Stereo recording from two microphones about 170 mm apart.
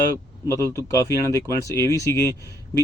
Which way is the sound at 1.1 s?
20° right (ahead or behind).